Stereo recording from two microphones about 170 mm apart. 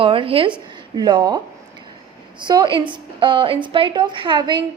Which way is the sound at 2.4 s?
25° right (ahead or behind).